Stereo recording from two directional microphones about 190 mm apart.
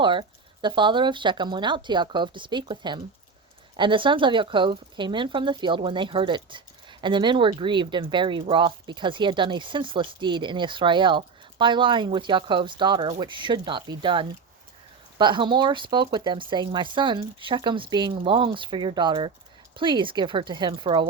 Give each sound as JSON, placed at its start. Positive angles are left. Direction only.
{"t": 0.0, "sound": "speech", "side_deg": -25}